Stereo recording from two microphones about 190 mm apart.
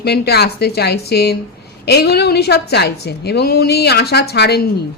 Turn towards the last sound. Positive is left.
turn(degrees=60)  # may be behind; listen again after turning